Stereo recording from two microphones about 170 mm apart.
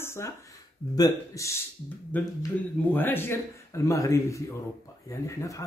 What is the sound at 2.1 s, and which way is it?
A man's voice, 10° left (ahead or behind).